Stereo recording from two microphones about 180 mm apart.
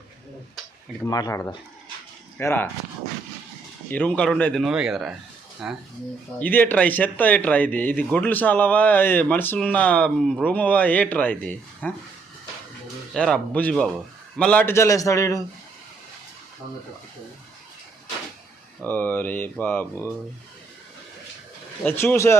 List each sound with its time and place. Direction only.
1.0 s speech: 20° left (ahead or behind)
3.9 s speech: 5° left (ahead or behind)
6.4 s speech: 10° left (ahead or behind)
13.1 s speech: 5° left (ahead or behind)
18.8 s speech: 10° left (ahead or behind)
21.8 s speech: 15° left (ahead or behind)